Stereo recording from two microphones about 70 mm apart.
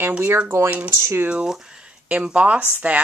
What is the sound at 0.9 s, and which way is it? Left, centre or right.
Speech, right.